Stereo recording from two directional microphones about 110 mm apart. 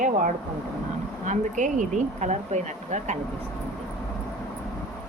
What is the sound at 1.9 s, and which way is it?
Speech, 90° right.